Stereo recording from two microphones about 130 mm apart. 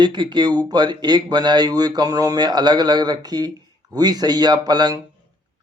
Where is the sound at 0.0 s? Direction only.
35° right (ahead or behind).